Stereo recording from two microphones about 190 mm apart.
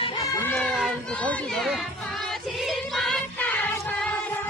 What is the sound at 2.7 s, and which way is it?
Music, centre (ahead or behind).